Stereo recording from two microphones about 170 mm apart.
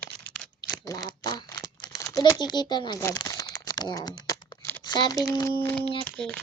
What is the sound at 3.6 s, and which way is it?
Typing, 20° left (ahead or behind).